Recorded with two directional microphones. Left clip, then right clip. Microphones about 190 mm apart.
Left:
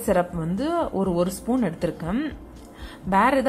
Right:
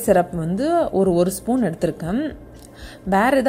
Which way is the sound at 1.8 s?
10° right (ahead or behind).